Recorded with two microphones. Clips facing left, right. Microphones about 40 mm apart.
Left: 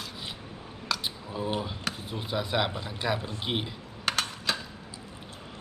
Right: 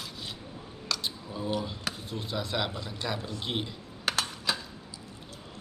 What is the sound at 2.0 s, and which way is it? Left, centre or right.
Speech, centre.